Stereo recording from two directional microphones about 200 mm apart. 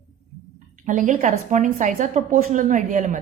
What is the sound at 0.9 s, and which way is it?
A woman's voice, 40° right (ahead or behind).